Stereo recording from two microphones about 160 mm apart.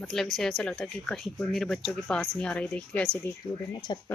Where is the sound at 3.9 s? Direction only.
25° left (ahead or behind).